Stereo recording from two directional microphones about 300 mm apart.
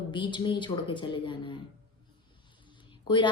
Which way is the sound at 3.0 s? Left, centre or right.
Centre.